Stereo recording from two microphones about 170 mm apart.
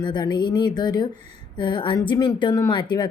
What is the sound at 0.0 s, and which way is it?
A woman's voice, 25° left (ahead or behind).